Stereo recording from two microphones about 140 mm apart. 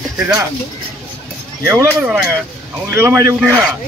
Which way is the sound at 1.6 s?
15° right (ahead or behind).